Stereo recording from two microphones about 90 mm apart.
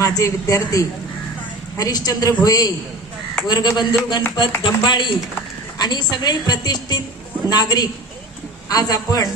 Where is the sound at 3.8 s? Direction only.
55° left (ahead or behind).